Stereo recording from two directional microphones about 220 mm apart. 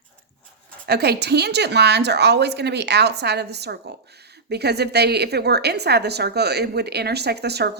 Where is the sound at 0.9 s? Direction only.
45° right (ahead or behind).